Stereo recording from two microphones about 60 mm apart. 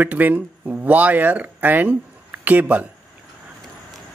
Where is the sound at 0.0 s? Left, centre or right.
Right.